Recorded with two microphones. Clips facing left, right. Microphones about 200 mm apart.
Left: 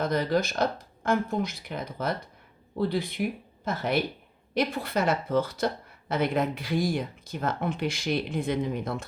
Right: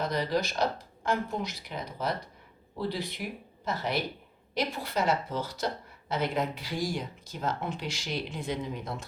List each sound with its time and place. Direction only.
0.0 s speech: 50° left (ahead or behind)